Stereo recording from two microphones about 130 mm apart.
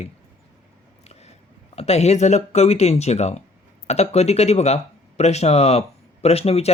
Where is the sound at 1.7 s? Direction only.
55° left (ahead or behind).